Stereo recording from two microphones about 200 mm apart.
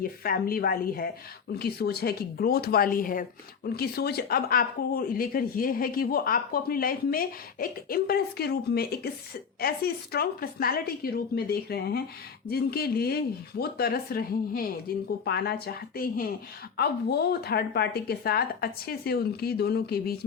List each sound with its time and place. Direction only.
0.0 s speech: 45° left (ahead or behind)